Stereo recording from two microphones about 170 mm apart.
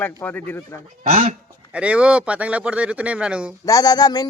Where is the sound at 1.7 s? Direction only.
5° right (ahead or behind).